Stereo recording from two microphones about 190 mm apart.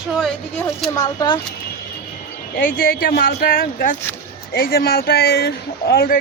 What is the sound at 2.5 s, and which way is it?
Speech, 50° left (ahead or behind).